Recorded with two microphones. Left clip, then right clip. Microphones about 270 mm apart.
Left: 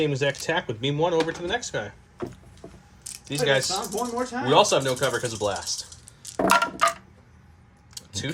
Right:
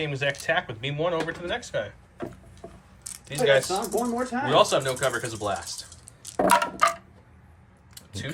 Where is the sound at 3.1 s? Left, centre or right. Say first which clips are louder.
Right 1 dB; centre.